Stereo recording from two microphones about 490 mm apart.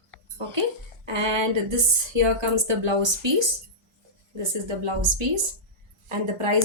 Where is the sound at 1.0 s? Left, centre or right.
Right.